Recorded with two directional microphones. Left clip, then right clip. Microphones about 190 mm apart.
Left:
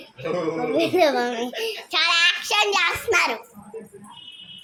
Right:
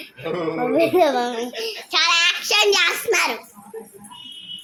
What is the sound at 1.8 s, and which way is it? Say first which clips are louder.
A child's voice: right 2 dB; 10° right (ahead or behind).